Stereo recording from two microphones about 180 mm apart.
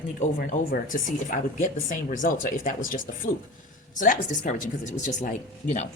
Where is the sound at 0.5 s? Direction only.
50° left (ahead or behind).